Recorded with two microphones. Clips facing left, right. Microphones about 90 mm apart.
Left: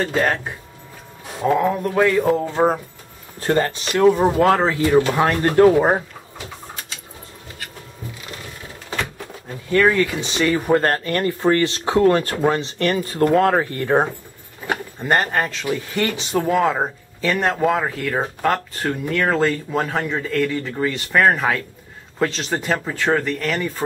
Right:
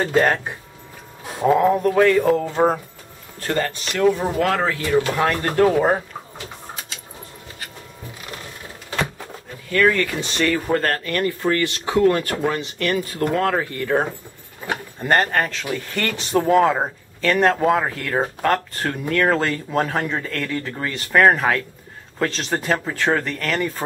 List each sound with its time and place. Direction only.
0.0 s speech: 5° right (ahead or behind)
2.0 s speech: 5° left (ahead or behind)
3.3 s speech: 25° left (ahead or behind)
9.7 s speech: 20° left (ahead or behind)
9.9 s speech: 5° left (ahead or behind)
10.5 s speech: 20° left (ahead or behind)
15.0 s speech: 10° left (ahead or behind)